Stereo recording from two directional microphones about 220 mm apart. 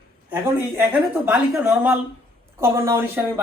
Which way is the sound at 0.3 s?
10° right (ahead or behind).